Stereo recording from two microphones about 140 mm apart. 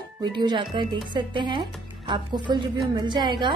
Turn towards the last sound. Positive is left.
turn(degrees=-30)  # may be behind; listen again after turning